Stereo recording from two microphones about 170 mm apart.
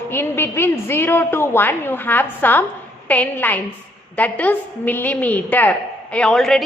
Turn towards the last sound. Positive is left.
turn(degrees=0)  # may be behind; listen again after turning